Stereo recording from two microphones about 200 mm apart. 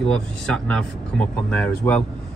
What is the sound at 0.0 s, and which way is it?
Speech, 5° left (ahead or behind).